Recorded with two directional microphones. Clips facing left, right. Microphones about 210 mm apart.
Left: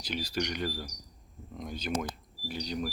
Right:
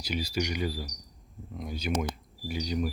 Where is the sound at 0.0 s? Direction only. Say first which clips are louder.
Right 2 dB; 10° right (ahead or behind).